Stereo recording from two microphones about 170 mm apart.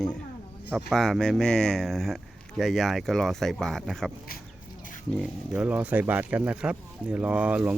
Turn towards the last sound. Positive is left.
turn(degrees=-10)  # may be behind; listen again after turning